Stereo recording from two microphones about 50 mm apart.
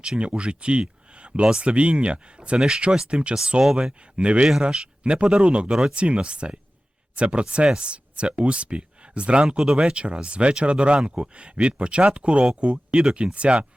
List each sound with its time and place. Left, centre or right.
0.2 s speech: right
2.6 s speech: centre